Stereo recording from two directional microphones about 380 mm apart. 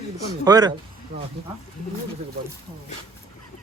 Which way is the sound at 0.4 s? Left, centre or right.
Centre.